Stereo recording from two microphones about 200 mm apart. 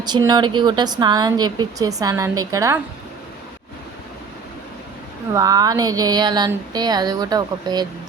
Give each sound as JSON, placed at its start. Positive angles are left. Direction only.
{"t": 0.0, "sound": "a woman's voice", "side_deg": -20}
{"t": 5.3, "sound": "a woman's voice", "side_deg": -15}